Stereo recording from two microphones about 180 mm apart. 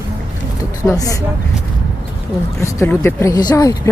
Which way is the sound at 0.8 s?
20° left (ahead or behind).